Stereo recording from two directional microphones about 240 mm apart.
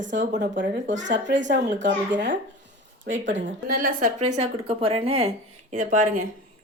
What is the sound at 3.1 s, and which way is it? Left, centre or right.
Speech, right.